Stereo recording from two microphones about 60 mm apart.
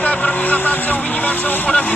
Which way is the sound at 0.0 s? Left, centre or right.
Left.